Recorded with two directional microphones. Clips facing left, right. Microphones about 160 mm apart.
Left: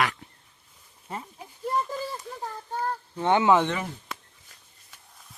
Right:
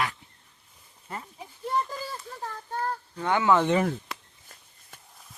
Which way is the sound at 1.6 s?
Centre (ahead or behind).